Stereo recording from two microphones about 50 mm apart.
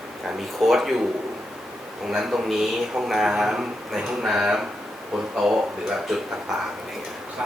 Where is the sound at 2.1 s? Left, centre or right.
Centre.